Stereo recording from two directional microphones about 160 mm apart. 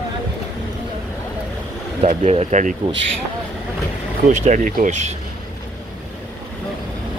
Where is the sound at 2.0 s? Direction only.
40° right (ahead or behind).